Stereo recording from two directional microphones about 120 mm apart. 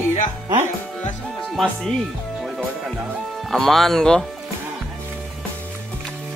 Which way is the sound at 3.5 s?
5° left (ahead or behind).